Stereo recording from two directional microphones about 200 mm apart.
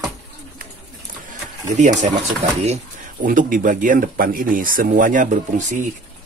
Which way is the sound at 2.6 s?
40° right (ahead or behind).